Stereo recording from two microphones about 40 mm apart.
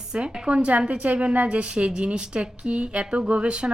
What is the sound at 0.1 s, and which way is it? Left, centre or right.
A woman's voice, right.